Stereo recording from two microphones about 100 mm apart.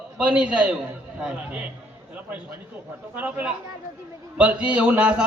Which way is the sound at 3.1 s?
15° right (ahead or behind).